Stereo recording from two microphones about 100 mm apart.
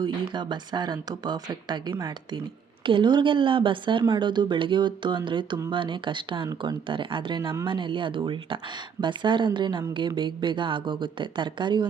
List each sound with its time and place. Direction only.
0.0 s speech: 50° right (ahead or behind)